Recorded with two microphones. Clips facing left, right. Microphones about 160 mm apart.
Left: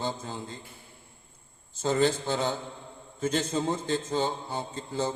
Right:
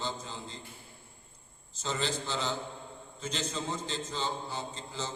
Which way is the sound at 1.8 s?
50° left (ahead or behind).